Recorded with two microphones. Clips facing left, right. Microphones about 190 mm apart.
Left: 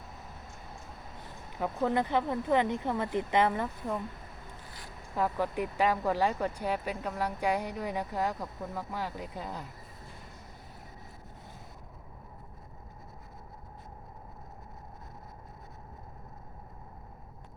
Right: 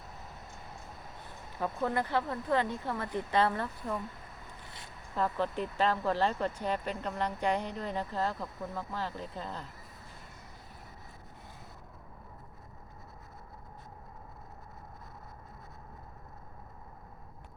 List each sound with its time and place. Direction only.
1.5 s speech: 15° left (ahead or behind)
5.1 s speech: 10° left (ahead or behind)